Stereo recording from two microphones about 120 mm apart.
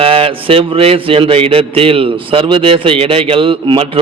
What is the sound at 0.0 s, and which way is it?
A man's voice, 50° right (ahead or behind).